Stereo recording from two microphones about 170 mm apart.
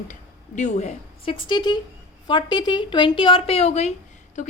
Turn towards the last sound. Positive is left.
turn(degrees=40)  # may be behind; listen again after turning